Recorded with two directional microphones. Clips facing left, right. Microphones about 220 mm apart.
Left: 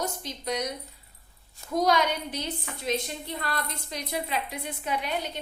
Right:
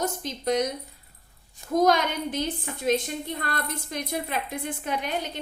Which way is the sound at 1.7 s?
50° right (ahead or behind).